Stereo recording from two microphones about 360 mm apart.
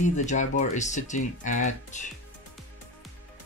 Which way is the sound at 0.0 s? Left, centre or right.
Centre.